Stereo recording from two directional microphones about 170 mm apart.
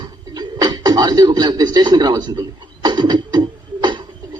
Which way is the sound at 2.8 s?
25° right (ahead or behind).